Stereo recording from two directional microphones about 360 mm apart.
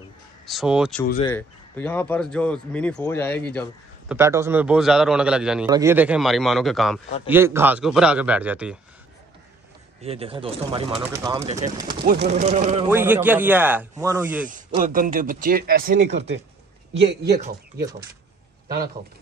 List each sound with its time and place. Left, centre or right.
0.5 s a man's voice: centre
1.0 s speech: left
1.3 s a man's voice: centre
4.1 s a man's voice: centre
10.0 s speech: centre
12.0 s speech: right
12.9 s a man's voice: centre
14.5 s speech: right